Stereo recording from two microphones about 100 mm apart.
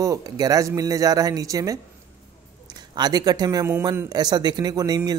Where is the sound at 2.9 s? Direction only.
40° right (ahead or behind).